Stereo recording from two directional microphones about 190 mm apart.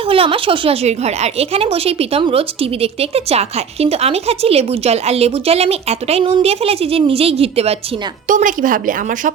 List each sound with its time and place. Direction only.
0.1 s speech: 30° right (ahead or behind)
8.3 s a woman's voice: 40° right (ahead or behind)